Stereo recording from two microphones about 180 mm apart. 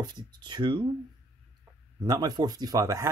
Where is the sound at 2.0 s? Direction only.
20° right (ahead or behind).